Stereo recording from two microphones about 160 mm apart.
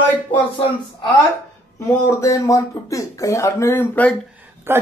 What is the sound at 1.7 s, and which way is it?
Speech, 20° left (ahead or behind).